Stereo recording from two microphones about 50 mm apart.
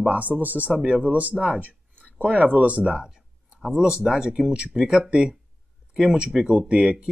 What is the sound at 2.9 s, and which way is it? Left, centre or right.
Speech, centre.